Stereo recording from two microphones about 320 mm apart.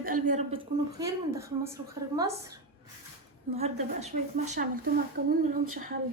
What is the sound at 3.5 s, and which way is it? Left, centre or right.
Speech, centre.